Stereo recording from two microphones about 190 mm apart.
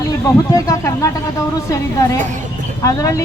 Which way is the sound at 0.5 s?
15° left (ahead or behind).